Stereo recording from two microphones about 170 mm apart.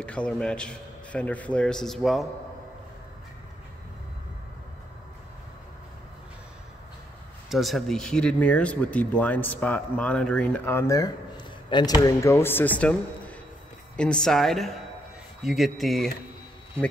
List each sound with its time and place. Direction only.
0.0 s a man's voice: 5° left (ahead or behind)
7.4 s a man's voice: centre (ahead or behind)